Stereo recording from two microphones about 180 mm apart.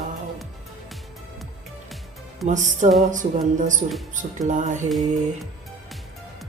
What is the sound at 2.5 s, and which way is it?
Speech, 45° right (ahead or behind).